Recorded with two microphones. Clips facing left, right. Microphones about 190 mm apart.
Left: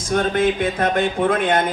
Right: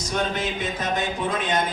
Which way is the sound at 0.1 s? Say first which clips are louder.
Left 8 dB; 50° left (ahead or behind).